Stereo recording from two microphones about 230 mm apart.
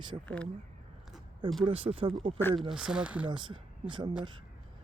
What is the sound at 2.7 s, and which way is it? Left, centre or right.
Speech, centre.